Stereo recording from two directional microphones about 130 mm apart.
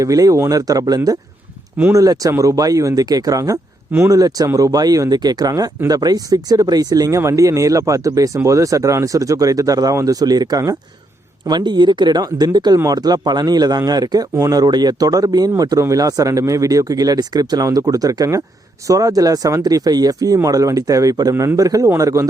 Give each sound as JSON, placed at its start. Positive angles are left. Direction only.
{"t": 0.0, "sound": "speech", "side_deg": -25}